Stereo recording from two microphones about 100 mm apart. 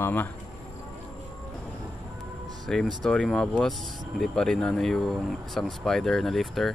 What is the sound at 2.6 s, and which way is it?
Speech, 5° left (ahead or behind).